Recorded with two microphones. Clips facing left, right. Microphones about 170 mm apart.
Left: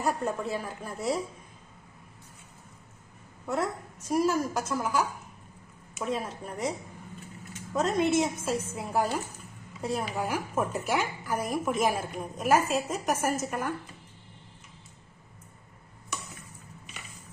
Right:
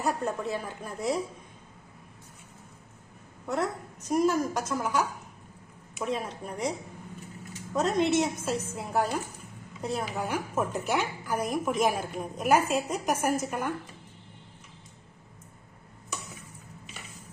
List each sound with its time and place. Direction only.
0.0 s a woman's voice: 5° left (ahead or behind)
3.4 s a woman's voice: 5° left (ahead or behind)